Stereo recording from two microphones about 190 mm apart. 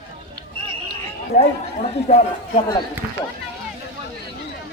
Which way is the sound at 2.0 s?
35° left (ahead or behind).